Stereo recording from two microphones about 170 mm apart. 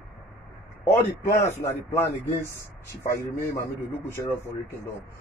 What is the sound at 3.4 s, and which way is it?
Speech, 15° left (ahead or behind).